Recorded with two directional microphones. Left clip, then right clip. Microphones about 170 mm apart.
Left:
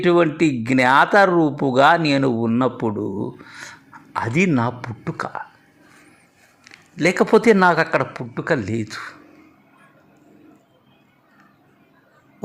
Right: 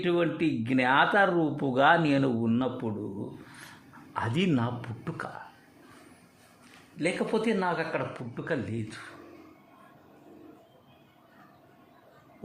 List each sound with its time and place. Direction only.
0.0 s speech: 35° left (ahead or behind)
2.6 s a man's voice: 40° left (ahead or behind)
7.0 s a man's voice: 45° left (ahead or behind)